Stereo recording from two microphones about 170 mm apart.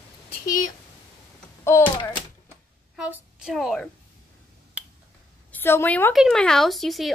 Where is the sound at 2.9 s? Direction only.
5° right (ahead or behind).